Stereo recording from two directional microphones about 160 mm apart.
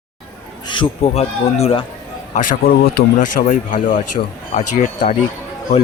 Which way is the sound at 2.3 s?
60° left (ahead or behind).